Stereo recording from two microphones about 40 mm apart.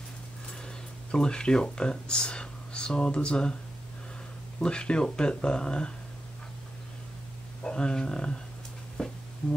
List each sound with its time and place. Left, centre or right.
0.7 s speech: centre
4.6 s speech: left
7.6 s speech: left
9.0 s a sound: centre
9.4 s speech: left